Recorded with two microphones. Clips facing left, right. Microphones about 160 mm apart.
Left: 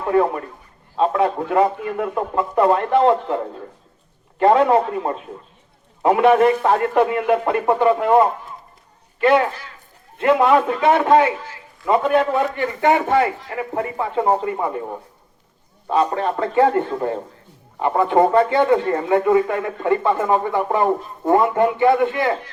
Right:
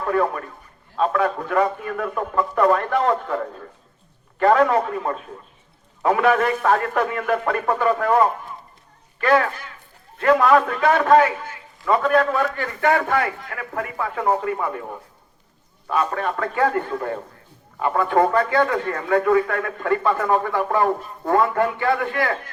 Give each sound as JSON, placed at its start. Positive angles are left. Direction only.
{"t": 0.0, "sound": "a man's voice", "side_deg": 25}
{"t": 15.9, "sound": "speech", "side_deg": 25}